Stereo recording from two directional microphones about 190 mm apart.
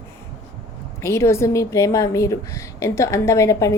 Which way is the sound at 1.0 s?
15° left (ahead or behind).